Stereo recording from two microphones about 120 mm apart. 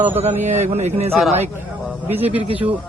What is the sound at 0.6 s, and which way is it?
Speech, 65° right (ahead or behind).